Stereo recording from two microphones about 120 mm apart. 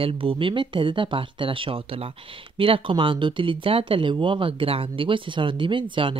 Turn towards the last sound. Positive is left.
turn(degrees=-45)  # may be behind; listen again after turning